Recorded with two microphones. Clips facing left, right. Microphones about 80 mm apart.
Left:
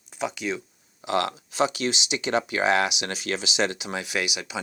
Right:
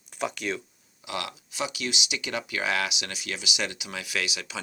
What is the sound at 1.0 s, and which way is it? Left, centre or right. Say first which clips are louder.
Speech: left 9 dB; left.